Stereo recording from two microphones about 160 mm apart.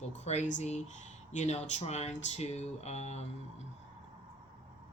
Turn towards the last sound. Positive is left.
turn(degrees=45)  # may be behind; listen again after turning